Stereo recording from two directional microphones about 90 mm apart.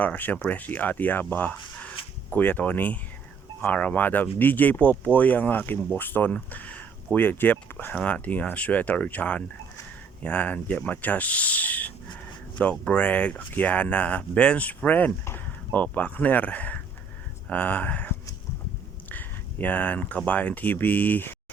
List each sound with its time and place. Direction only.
0.0 s speech: 20° left (ahead or behind)
19.0 s a sound: 20° left (ahead or behind)
20.2 s speech: 15° left (ahead or behind)